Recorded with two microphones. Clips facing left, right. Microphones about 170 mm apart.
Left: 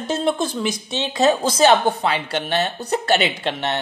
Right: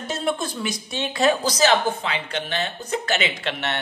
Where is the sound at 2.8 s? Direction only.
35° left (ahead or behind).